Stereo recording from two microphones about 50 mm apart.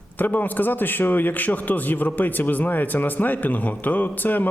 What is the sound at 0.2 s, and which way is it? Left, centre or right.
A man's voice, left.